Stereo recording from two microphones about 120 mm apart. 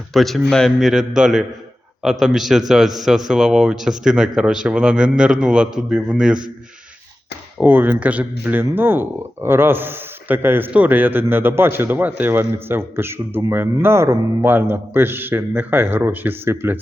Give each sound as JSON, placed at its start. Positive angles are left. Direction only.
{"t": 0.1, "sound": "a man's voice", "side_deg": 0}
{"t": 7.6, "sound": "speech", "side_deg": -15}